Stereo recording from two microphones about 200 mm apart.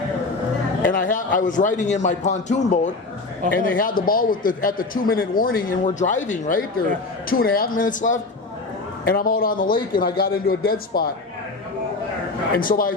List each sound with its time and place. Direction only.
0.8 s a man's voice: 45° left (ahead or behind)
12.5 s a man's voice: 45° left (ahead or behind)